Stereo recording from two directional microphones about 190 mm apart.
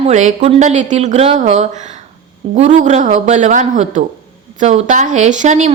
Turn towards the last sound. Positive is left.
turn(degrees=-40)  # may be behind; listen again after turning